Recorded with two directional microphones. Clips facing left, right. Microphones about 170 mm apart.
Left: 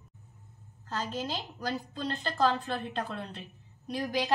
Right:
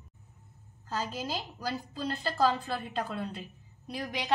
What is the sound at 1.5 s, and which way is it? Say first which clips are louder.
A woman's voice: left 1 dB; 5° right (ahead or behind).